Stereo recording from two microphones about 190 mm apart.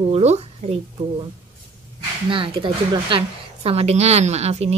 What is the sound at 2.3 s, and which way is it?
A woman's voice, 25° right (ahead or behind).